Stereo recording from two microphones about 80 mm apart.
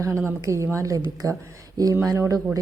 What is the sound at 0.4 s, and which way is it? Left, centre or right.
Speech, right.